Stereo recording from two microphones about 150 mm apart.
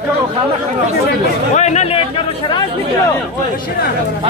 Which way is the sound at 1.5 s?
50° left (ahead or behind).